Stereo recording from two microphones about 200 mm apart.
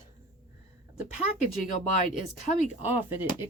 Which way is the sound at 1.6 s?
40° left (ahead or behind).